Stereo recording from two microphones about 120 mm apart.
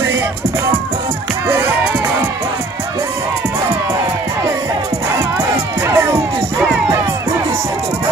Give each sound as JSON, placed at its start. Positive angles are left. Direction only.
{"t": 5.9, "sound": "music", "side_deg": -25}